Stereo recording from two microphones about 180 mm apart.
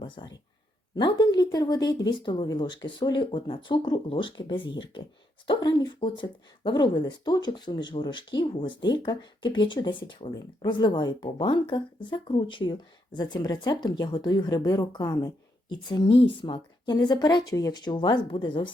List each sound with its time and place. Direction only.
0.0 s speech: 25° left (ahead or behind)